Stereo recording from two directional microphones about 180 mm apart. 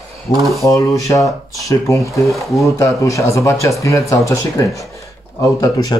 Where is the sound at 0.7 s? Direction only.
20° left (ahead or behind).